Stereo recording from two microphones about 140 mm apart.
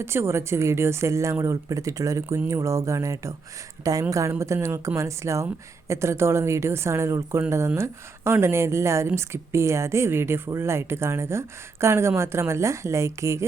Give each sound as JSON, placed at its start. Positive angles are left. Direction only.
{"t": 0.0, "sound": "a woman's voice", "side_deg": -20}